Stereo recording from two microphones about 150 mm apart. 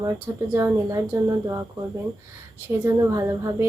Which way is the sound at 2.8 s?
20° right (ahead or behind).